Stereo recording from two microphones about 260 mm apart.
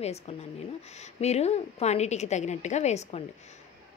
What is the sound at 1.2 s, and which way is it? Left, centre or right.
A woman's voice, left.